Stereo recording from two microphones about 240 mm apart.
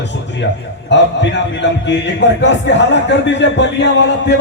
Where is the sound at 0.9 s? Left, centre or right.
Left.